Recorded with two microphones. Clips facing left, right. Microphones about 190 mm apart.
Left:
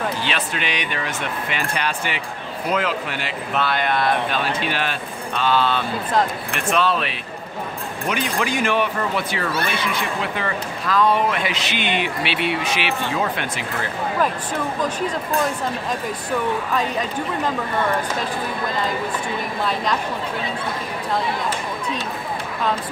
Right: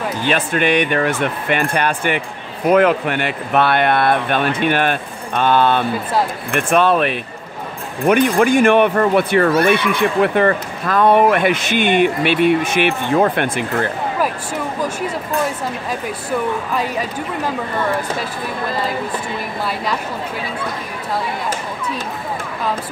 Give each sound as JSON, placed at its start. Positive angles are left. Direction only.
{"t": 0.2, "sound": "speech", "side_deg": -50}